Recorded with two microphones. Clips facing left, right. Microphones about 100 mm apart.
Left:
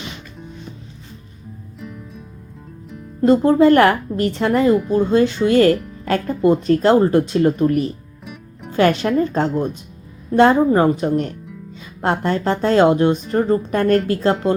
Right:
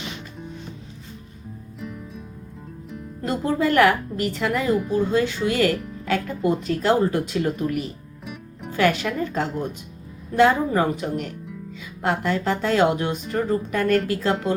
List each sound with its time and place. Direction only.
1.8 s music: centre (ahead or behind)
3.5 s speech: 35° left (ahead or behind)
4.7 s speech: centre (ahead or behind)
5.1 s speech: 30° left (ahead or behind)
8.2 s music: centre (ahead or behind)
8.7 s speech: 35° left (ahead or behind)